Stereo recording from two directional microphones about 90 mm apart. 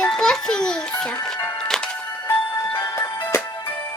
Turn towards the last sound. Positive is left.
turn(degrees=25)  # may be behind; listen again after turning